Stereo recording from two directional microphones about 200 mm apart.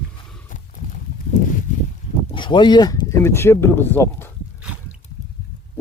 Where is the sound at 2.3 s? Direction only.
25° left (ahead or behind).